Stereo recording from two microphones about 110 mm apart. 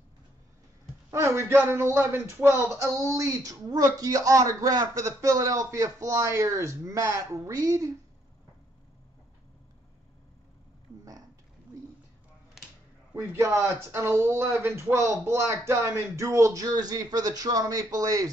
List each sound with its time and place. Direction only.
1.1 s speech: 25° right (ahead or behind)
12.6 s music: 5° right (ahead or behind)
13.1 s speech: 25° right (ahead or behind)